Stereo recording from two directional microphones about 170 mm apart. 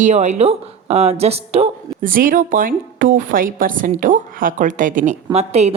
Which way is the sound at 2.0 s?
55° right (ahead or behind).